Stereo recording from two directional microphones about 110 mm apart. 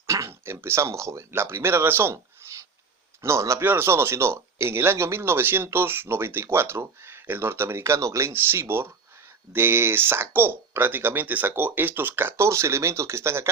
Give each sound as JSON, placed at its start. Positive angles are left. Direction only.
{"t": 0.1, "sound": "speech", "side_deg": -25}
{"t": 2.4, "sound": "a sound", "side_deg": -25}
{"t": 3.2, "sound": "speech", "side_deg": -25}